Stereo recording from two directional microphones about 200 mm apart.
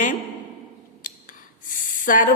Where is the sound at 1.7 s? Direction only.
40° left (ahead or behind).